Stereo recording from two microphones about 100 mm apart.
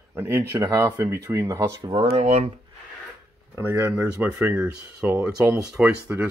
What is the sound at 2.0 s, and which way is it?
Speech, 85° right.